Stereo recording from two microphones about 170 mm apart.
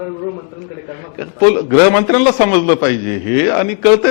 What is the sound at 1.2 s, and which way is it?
A man's voice, 15° left (ahead or behind).